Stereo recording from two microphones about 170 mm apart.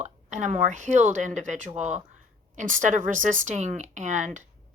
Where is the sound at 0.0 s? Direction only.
45° right (ahead or behind).